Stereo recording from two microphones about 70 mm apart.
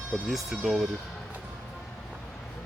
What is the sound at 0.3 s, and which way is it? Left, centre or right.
Speech, centre.